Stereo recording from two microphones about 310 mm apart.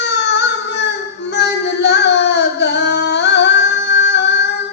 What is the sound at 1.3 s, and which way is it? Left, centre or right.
Singing, left.